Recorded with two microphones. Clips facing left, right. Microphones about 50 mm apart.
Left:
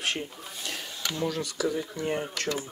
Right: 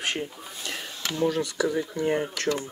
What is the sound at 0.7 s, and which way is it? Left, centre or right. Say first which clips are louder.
Speech: right 2 dB; right.